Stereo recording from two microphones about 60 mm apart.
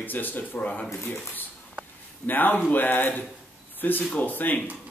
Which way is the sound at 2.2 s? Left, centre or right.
Left.